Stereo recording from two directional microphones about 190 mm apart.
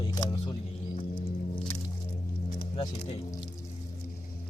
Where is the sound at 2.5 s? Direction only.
30° left (ahead or behind).